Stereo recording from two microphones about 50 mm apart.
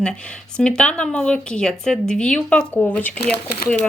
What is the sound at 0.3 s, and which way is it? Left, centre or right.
A woman's voice, centre.